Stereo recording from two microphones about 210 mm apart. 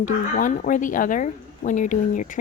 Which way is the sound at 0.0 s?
40° left (ahead or behind).